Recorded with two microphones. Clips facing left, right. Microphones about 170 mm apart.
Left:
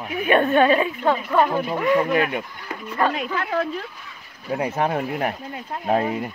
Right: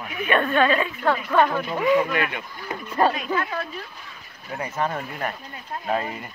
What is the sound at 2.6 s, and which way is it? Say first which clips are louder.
Speech: right 3 dB; 25° right (ahead or behind).